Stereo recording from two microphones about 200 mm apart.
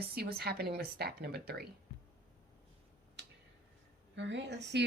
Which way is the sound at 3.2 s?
60° right (ahead or behind).